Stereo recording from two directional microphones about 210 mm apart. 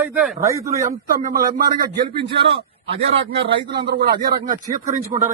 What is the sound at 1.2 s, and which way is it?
Speech, 40° right (ahead or behind).